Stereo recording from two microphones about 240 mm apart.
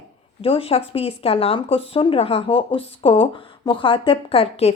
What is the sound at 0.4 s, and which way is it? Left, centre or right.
A woman's voice, left.